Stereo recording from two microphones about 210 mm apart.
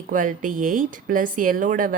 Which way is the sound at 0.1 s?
40° right (ahead or behind).